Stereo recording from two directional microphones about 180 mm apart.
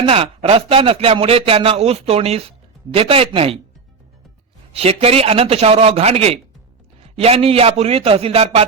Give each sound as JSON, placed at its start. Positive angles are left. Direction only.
{"t": 0.0, "sound": "a man's voice", "side_deg": -30}
{"t": 4.7, "sound": "a man's voice", "side_deg": -35}